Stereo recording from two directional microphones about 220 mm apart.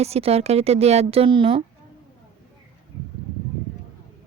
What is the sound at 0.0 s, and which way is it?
A woman's voice, 30° right (ahead or behind).